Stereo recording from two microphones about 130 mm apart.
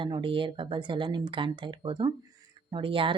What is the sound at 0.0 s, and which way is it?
Speech, 40° right (ahead or behind).